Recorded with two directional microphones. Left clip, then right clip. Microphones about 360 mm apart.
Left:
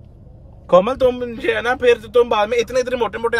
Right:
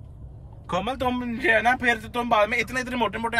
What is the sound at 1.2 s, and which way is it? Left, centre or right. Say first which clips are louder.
Speech: left 1 dB; centre.